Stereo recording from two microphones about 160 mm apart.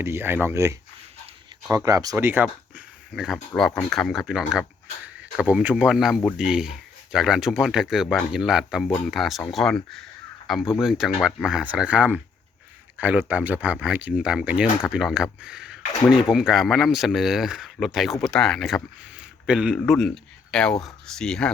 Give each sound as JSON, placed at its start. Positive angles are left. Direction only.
{"t": 0.0, "sound": "speech", "side_deg": -15}